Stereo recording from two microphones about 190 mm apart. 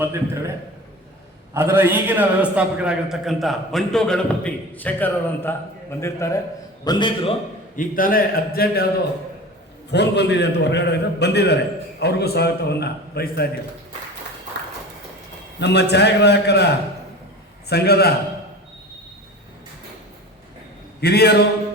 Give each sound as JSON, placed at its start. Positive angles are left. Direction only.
{"t": 0.0, "sound": "a man's voice", "side_deg": -15}
{"t": 1.5, "sound": "a man's voice", "side_deg": -10}
{"t": 7.8, "sound": "a man's voice", "side_deg": 45}
{"t": 9.9, "sound": "a man's voice", "side_deg": 65}
{"t": 15.6, "sound": "a man's voice", "side_deg": 60}
{"t": 17.7, "sound": "a man's voice", "side_deg": 60}
{"t": 21.0, "sound": "a man's voice", "side_deg": 55}